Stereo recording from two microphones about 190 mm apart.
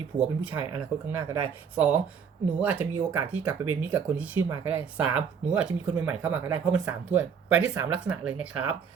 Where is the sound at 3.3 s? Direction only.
10° right (ahead or behind).